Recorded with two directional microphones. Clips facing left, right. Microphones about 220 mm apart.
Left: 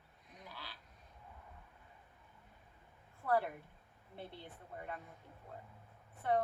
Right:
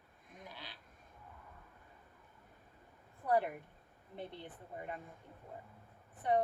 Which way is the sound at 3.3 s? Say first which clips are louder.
Right 2 dB; 20° right (ahead or behind).